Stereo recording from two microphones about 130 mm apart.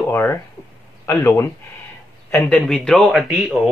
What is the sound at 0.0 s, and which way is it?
Speech, 20° left (ahead or behind).